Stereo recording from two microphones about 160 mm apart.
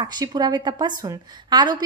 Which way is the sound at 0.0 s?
25° right (ahead or behind).